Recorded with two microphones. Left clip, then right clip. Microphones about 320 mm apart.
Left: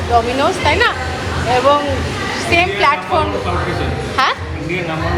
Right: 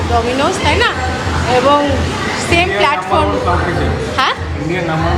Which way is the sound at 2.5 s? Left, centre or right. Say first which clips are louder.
Even; centre.